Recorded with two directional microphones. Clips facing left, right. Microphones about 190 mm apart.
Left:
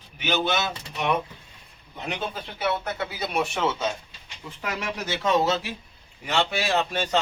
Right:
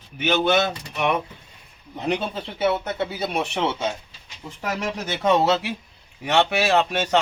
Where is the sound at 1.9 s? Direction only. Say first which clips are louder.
Right 6 dB; 30° right (ahead or behind).